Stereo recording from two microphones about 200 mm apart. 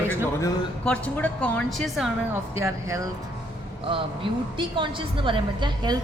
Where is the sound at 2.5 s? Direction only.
15° right (ahead or behind).